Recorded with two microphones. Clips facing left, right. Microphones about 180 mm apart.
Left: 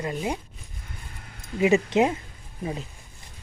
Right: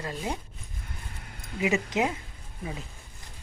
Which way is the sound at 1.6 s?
30° left (ahead or behind).